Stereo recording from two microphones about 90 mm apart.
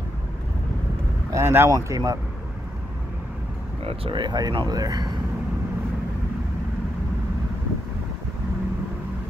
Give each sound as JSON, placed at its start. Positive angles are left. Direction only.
{"t": 1.3, "sound": "speech", "side_deg": -30}
{"t": 1.9, "sound": "speech", "side_deg": -40}
{"t": 3.8, "sound": "speech", "side_deg": -75}